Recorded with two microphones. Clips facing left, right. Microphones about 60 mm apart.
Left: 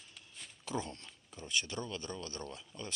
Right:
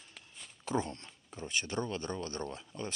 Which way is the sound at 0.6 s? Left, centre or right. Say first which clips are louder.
Right 5 dB; right.